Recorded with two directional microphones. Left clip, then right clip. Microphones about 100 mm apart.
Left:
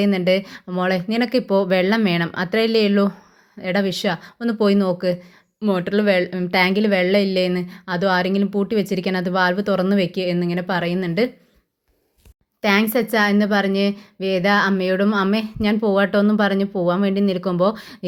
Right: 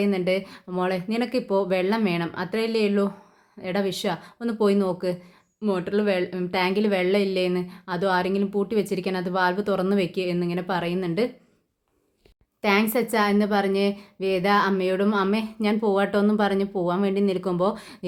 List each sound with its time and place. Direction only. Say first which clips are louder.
0.0 s speech: left 5 dB; 50° left (ahead or behind)
5.6 s speech: left 5 dB; 55° left (ahead or behind)
6.8 s speech: left 5 dB; 40° left (ahead or behind)
12.6 s speech: left 4 dB; 35° left (ahead or behind)